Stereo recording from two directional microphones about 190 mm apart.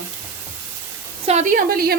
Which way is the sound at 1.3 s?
40° right (ahead or behind).